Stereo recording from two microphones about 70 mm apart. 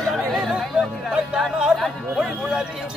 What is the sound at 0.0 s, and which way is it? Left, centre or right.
Music, centre.